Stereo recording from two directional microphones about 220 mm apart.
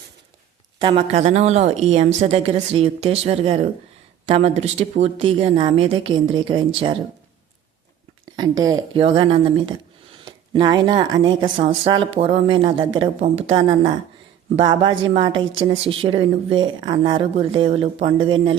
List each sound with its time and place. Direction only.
0.8 s speech: 25° right (ahead or behind)
8.4 s speech: 15° right (ahead or behind)